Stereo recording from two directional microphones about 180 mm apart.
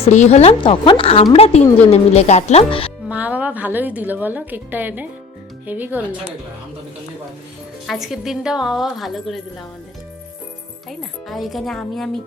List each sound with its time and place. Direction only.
0.0 s a woman's voice: 40° left (ahead or behind)
3.1 s a woman's voice: 10° right (ahead or behind)
7.9 s a woman's voice: centre (ahead or behind)
10.8 s a woman's voice: centre (ahead or behind)